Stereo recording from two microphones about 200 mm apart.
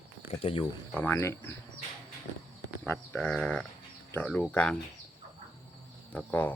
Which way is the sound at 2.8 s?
10° left (ahead or behind).